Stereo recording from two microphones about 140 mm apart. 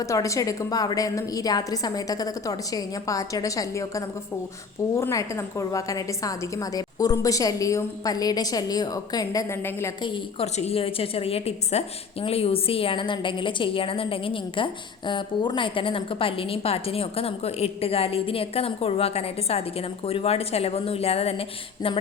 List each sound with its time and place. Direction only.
0.0 s a woman's voice: 20° left (ahead or behind)
10.0 s a woman's voice: 35° left (ahead or behind)
10.4 s a woman's voice: 50° left (ahead or behind)